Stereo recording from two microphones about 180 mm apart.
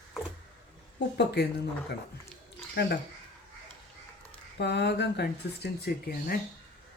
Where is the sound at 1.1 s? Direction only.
65° left (ahead or behind).